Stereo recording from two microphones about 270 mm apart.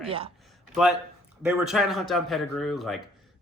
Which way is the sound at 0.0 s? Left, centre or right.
Right.